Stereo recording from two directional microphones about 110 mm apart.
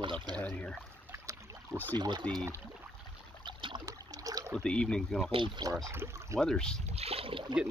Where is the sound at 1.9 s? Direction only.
40° right (ahead or behind).